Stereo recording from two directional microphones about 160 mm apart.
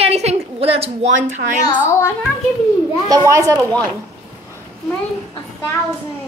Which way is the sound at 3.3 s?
20° right (ahead or behind).